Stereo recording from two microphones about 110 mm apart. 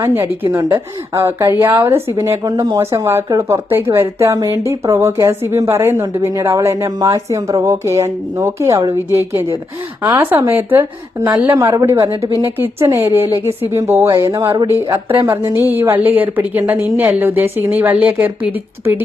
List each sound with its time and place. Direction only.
0.4 s a woman's voice: 30° right (ahead or behind)
14.7 s a woman's voice: 25° right (ahead or behind)